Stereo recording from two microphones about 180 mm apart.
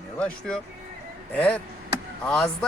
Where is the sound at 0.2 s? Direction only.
5° left (ahead or behind).